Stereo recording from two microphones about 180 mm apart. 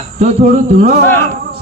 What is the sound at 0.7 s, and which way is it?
Speech, 40° right (ahead or behind).